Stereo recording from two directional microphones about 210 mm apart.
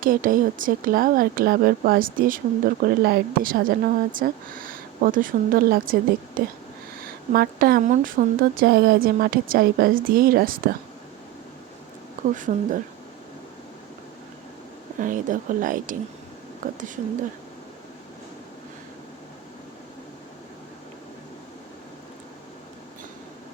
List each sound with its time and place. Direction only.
0.0 s speech: 40° right (ahead or behind)
12.3 s a woman's voice: 35° right (ahead or behind)
14.9 s a woman's voice: 40° right (ahead or behind)